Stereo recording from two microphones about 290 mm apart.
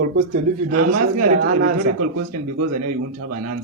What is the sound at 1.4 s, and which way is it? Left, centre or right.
Speech, right.